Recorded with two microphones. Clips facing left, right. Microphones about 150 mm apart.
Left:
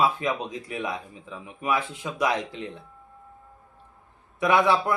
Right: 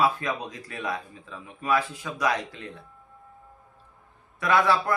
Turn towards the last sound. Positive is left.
turn(degrees=20)  # may be behind; listen again after turning